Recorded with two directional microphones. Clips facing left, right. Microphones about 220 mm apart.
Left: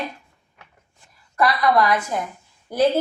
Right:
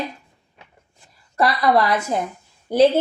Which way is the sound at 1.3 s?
25° right (ahead or behind).